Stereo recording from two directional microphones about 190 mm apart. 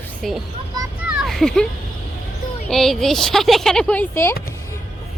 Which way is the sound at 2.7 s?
Centre (ahead or behind).